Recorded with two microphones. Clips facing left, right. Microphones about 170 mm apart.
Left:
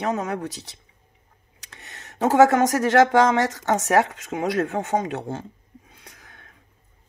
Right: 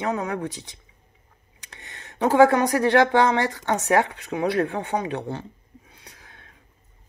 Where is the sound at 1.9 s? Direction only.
40° left (ahead or behind).